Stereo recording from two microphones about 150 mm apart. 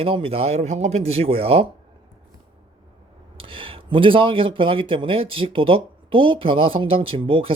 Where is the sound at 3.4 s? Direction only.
35° right (ahead or behind).